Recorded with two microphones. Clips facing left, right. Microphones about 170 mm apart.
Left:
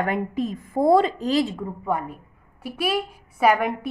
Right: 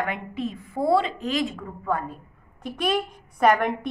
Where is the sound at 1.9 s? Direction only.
15° left (ahead or behind).